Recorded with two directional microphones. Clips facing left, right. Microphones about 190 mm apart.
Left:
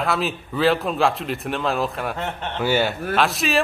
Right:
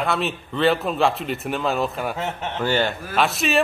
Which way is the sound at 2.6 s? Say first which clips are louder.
Left 2 dB; 10° left (ahead or behind).